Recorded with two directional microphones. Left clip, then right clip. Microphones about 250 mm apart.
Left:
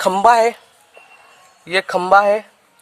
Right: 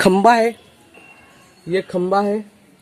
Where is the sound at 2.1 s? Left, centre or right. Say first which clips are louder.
Left 8 dB; left.